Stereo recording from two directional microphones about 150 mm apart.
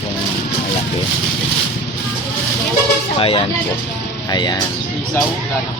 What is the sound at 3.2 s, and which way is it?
Speech, 40° left (ahead or behind).